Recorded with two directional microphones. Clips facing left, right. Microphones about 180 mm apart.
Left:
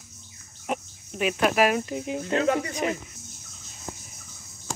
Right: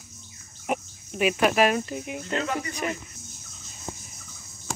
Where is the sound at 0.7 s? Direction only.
10° right (ahead or behind); by 2.0 s 5° left (ahead or behind).